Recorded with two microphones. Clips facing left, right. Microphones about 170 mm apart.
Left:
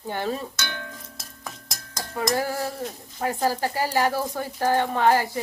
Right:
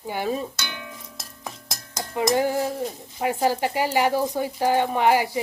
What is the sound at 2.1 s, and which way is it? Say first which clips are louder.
Speech: right 4 dB; 20° right (ahead or behind).